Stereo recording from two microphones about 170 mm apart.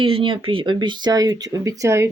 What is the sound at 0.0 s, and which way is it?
Speech, 30° right (ahead or behind).